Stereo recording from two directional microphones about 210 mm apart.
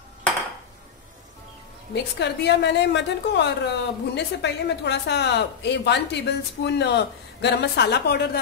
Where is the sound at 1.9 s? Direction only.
55° left (ahead or behind).